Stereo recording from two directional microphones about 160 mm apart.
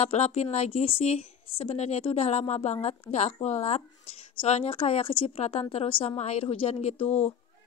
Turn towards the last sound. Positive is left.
turn(degrees=45)  # may be behind; listen again after turning